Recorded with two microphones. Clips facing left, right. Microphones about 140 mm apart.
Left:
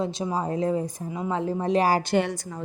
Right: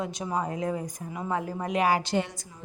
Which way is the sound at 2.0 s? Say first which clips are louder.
Left 5 dB; 65° left (ahead or behind).